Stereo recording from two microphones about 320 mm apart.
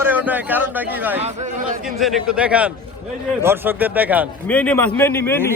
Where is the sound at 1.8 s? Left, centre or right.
Centre.